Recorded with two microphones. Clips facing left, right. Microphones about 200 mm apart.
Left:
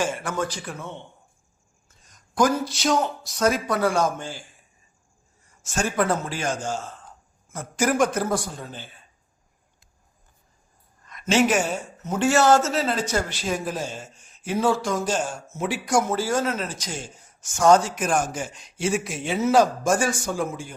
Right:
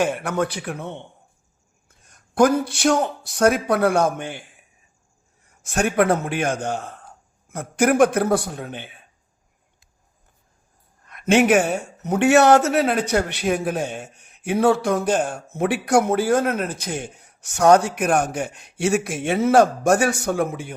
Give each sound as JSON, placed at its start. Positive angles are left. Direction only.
{"t": 0.0, "sound": "a man's voice", "side_deg": -60}
{"t": 11.1, "sound": "a man's voice", "side_deg": -60}